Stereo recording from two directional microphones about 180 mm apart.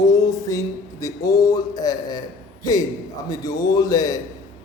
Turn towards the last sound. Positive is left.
turn(degrees=20)  # may be behind; listen again after turning